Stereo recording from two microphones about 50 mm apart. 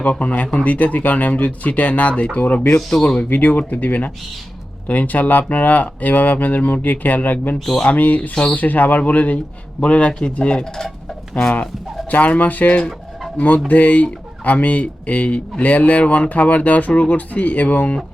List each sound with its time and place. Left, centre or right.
0.0 s speech: left